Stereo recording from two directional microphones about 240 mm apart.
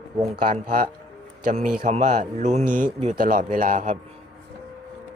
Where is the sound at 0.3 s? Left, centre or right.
Right.